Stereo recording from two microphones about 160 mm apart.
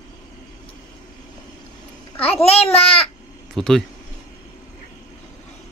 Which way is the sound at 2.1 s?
40° left (ahead or behind).